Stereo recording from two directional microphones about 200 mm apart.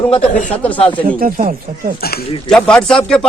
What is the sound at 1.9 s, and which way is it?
Speech, 50° left (ahead or behind).